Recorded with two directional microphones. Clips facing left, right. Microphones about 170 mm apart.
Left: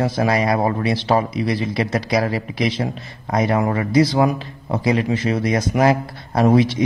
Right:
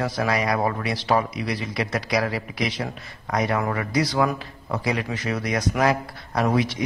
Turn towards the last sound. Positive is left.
turn(degrees=30)  # may be behind; listen again after turning